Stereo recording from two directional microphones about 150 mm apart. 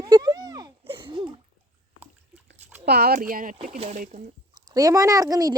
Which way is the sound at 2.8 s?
90° right.